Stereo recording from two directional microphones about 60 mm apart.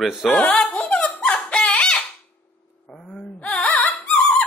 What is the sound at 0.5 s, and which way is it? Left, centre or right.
Singing, centre.